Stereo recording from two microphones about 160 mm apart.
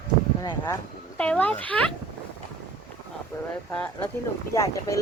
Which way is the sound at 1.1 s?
5° left (ahead or behind).